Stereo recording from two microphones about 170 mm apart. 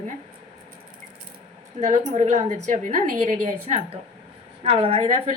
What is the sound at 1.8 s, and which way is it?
A woman's voice, 45° right (ahead or behind).